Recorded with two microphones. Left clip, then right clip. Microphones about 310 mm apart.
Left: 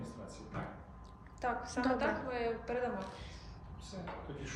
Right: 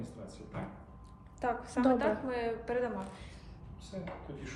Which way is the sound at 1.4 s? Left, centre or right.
Right.